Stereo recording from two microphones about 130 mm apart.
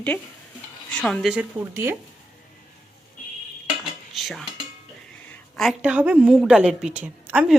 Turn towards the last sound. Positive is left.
turn(degrees=-10)  # may be behind; listen again after turning